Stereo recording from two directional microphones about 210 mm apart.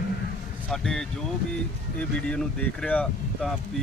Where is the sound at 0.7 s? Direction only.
Centre (ahead or behind).